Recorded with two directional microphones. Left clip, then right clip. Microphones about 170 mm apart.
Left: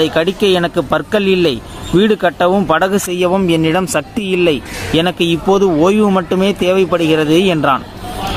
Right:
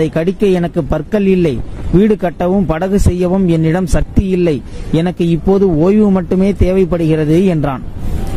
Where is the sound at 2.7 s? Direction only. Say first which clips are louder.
Left 3 dB; 45° right (ahead or behind).